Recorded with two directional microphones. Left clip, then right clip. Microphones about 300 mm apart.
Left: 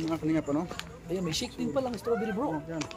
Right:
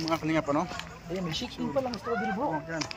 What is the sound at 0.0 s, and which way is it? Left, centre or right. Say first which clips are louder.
Speech: right 2 dB; centre.